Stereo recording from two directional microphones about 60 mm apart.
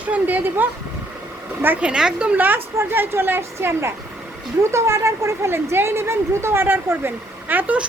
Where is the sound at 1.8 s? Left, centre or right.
Centre.